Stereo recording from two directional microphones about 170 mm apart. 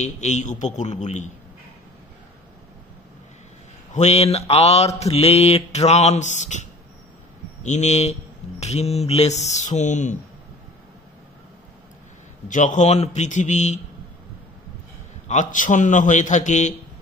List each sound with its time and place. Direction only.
0.0 s a man's voice: 45° left (ahead or behind)
3.9 s mantra: 40° left (ahead or behind)
12.4 s a man's voice: 50° left (ahead or behind)
15.2 s a man's voice: 45° left (ahead or behind)